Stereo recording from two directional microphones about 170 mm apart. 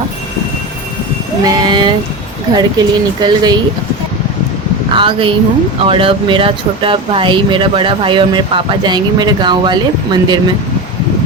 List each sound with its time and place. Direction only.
1.5 s speech: 25° right (ahead or behind)
4.9 s speech: 30° right (ahead or behind)